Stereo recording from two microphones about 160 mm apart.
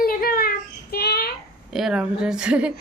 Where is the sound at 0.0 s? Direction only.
70° left (ahead or behind); by 1.3 s 85° left.